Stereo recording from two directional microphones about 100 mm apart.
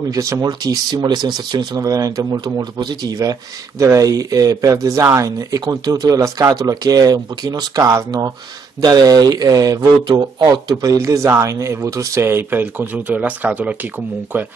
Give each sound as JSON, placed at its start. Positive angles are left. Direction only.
{"t": 0.1, "sound": "speech", "side_deg": -35}